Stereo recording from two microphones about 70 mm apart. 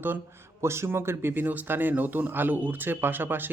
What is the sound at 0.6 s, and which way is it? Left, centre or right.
Speech, right.